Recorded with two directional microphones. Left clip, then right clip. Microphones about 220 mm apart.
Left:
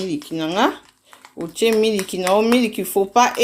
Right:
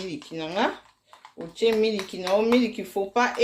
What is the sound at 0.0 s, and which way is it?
Speech, 30° left (ahead or behind).